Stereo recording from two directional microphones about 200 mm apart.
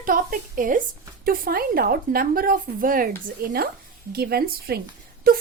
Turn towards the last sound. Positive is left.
turn(degrees=-45)  # may be behind; listen again after turning